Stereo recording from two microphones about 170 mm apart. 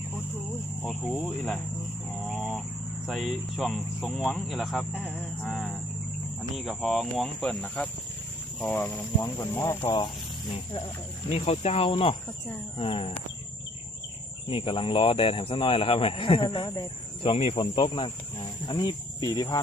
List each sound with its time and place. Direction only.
0.9 s speech: 5° right (ahead or behind)
2.2 s a sound: centre (ahead or behind)
3.1 s speech: centre (ahead or behind); by 9.9 s 15° left (ahead or behind)
10.5 s speech: 35° left (ahead or behind)
14.4 s speech: 30° left (ahead or behind)